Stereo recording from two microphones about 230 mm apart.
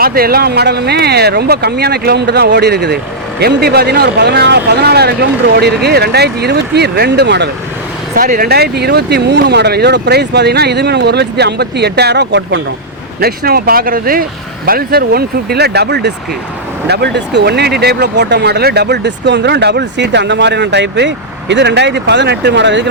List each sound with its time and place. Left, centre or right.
0.0 s speech: right
8.1 s speech: right